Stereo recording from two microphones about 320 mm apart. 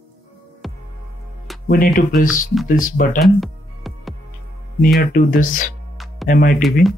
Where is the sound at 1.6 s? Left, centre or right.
Left.